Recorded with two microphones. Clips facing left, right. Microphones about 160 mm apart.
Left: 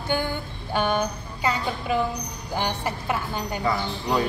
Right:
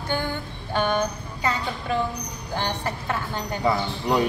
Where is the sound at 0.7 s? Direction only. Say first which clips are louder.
Even; 10° left (ahead or behind).